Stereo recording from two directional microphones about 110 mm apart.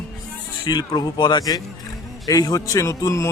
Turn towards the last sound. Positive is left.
turn(degrees=25)  # may be behind; listen again after turning